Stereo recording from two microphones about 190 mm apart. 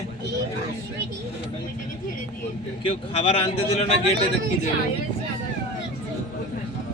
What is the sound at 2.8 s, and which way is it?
Speech, 30° left (ahead or behind).